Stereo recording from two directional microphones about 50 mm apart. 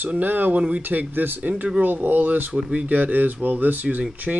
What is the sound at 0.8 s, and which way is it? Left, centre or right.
Speech, right.